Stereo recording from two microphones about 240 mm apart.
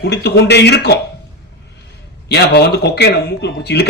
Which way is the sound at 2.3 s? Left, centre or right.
Left.